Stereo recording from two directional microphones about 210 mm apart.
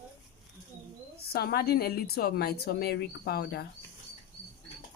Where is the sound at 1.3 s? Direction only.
50° left (ahead or behind).